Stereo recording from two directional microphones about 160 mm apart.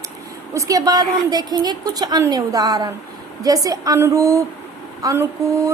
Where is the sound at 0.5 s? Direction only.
20° right (ahead or behind).